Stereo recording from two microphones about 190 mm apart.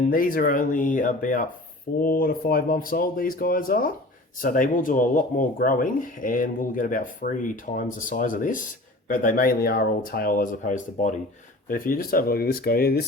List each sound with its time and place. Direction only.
0.1 s speech: 50° left (ahead or behind)